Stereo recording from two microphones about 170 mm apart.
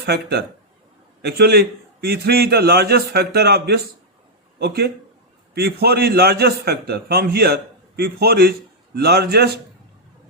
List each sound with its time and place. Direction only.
0.0 s a man's voice: 75° right (ahead or behind)